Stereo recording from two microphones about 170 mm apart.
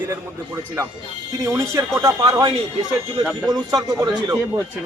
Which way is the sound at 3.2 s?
Centre (ahead or behind).